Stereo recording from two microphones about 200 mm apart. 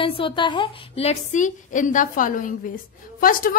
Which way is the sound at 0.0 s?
25° left (ahead or behind).